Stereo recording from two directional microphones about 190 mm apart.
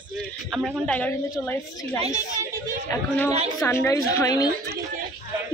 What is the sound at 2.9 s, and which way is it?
A woman's voice, 10° left (ahead or behind).